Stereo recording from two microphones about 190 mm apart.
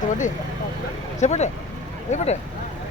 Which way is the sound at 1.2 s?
35° left (ahead or behind).